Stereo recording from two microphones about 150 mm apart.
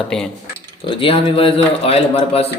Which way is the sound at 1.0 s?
35° left (ahead or behind).